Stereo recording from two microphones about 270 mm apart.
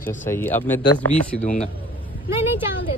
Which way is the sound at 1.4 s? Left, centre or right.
Left.